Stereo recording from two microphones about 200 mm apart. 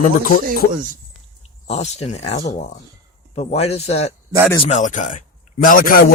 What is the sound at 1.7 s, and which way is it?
A man's voice, 30° left (ahead or behind).